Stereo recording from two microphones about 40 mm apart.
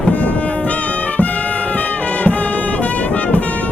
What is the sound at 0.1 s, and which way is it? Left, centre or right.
Brass instrument, left.